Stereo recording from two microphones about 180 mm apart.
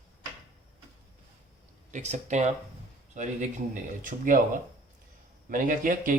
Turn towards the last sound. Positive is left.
turn(degrees=-50)  # may be behind; listen again after turning